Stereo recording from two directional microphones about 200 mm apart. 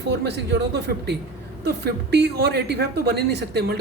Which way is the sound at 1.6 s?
55° right (ahead or behind).